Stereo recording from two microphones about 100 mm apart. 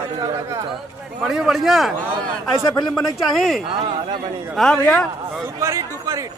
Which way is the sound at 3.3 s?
Centre (ahead or behind).